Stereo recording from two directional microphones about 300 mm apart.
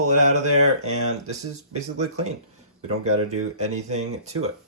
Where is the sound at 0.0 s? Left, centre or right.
Right.